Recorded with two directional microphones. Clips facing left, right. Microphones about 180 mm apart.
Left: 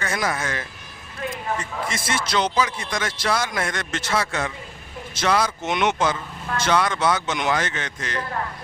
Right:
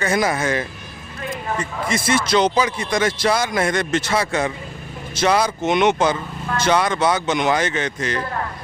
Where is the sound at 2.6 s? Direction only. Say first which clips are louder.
Right 5 dB; 10° right (ahead or behind).